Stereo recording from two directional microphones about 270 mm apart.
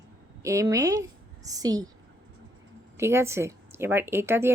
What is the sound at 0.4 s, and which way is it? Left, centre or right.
A woman's voice, centre.